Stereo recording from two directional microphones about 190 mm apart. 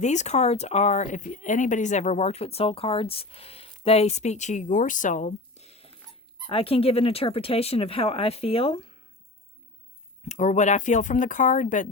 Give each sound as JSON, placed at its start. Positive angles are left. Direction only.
{"t": 0.0, "sound": "speech", "side_deg": 40}
{"t": 10.2, "sound": "speech", "side_deg": 40}